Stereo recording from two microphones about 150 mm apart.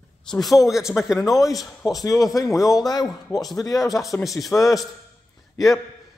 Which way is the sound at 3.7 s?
Centre (ahead or behind).